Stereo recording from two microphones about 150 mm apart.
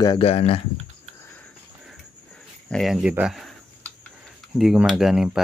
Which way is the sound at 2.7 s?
Centre (ahead or behind).